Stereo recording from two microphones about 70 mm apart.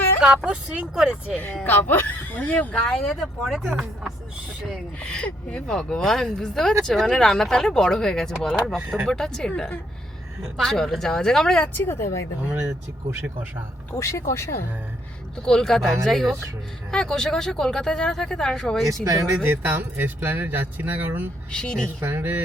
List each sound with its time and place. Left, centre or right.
0.2 s speech: centre
1.6 s speech: left
2.8 s speech: centre
4.9 s speech: centre
10.6 s speech: centre
11.7 s speech: left
14.0 s speech: left
15.4 s speech: centre
19.0 s speech: right
19.4 s speech: right
21.5 s speech: centre
22.0 s speech: right